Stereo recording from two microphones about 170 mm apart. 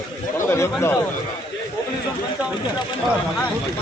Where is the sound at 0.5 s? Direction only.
15° left (ahead or behind).